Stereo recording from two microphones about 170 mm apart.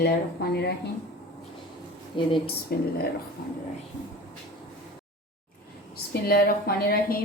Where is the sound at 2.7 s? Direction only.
70° left (ahead or behind).